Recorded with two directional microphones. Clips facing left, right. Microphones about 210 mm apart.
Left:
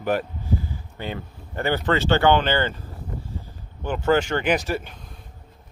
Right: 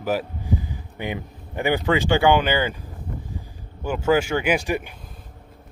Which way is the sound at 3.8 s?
10° right (ahead or behind).